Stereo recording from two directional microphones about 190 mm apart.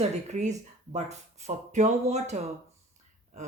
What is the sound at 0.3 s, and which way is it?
Speech, 35° right (ahead or behind).